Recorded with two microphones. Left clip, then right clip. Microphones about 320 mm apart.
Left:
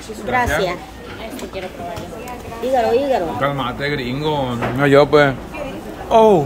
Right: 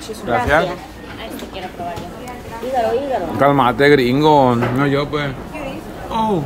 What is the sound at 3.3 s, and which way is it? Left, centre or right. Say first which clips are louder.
Speech: right 7 dB; centre.